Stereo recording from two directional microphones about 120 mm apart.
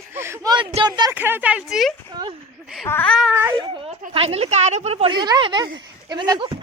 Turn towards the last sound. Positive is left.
turn(degrees=-40)  # may be behind; listen again after turning